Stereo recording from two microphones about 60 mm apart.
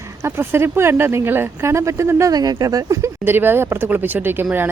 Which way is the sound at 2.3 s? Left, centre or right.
Right.